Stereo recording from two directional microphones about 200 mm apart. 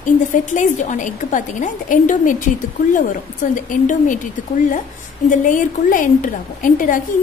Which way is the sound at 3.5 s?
40° left (ahead or behind).